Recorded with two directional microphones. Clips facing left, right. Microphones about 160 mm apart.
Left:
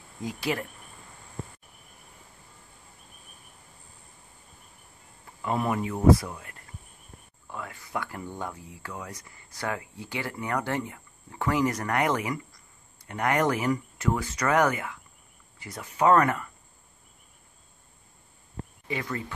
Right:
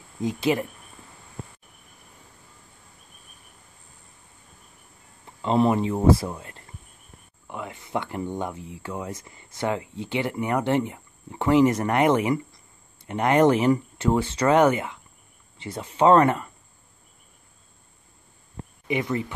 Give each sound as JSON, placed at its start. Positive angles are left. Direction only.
{"t": 0.2, "sound": "speech", "side_deg": -20}
{"t": 5.4, "sound": "speech", "side_deg": -25}
{"t": 18.9, "sound": "speech", "side_deg": -20}